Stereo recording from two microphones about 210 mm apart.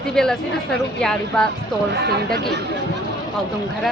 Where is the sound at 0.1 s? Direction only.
5° left (ahead or behind).